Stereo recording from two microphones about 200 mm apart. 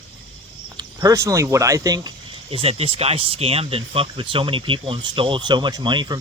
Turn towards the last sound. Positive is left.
turn(degrees=-20)  # may be behind; listen again after turning